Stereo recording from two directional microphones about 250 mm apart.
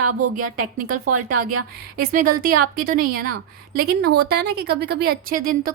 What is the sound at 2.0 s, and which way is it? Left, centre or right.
A woman's voice, right.